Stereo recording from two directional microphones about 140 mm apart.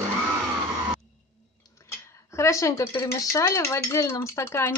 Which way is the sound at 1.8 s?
20° left (ahead or behind).